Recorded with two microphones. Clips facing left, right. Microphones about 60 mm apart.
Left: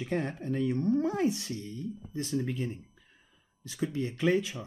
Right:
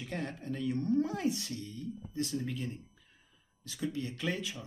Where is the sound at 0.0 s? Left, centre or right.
Left.